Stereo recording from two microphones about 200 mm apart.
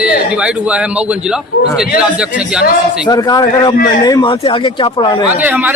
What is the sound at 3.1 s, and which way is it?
Speech, 20° left (ahead or behind).